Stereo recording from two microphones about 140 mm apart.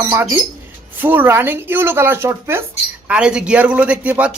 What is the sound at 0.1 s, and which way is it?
A man's voice, 15° right (ahead or behind).